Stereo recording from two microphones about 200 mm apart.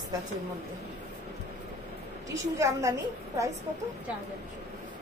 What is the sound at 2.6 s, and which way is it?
Speech, 15° right (ahead or behind).